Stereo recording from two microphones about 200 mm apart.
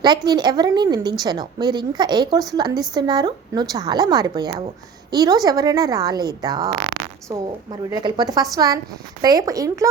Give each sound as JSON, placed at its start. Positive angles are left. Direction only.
{"t": 0.3, "sound": "a woman's voice", "side_deg": -20}